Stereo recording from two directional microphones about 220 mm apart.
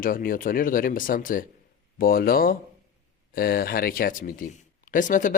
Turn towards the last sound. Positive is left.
turn(degrees=35)  # may be behind; listen again after turning